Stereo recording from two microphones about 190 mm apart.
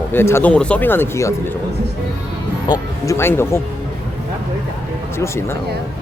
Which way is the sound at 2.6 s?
20° left (ahead or behind).